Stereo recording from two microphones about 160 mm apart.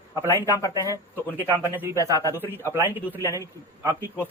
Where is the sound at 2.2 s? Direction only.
20° left (ahead or behind).